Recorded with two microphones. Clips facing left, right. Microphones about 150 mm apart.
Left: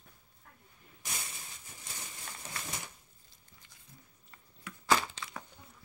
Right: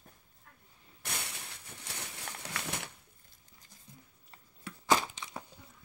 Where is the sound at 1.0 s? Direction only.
65° right (ahead or behind).